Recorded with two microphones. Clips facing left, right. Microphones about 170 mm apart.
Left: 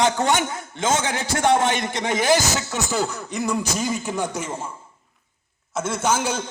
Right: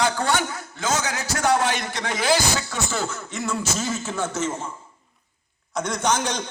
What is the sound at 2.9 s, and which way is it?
Speech, 15° left (ahead or behind).